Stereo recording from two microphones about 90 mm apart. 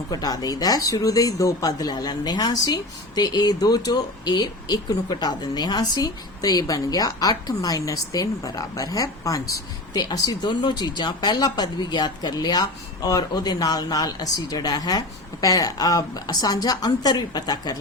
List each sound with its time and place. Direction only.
0.1 s speech: 45° left (ahead or behind)